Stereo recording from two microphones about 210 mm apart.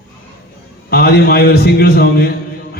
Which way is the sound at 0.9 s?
45° left (ahead or behind).